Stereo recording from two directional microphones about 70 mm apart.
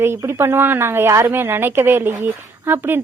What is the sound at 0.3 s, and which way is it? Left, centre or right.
A woman's voice, right.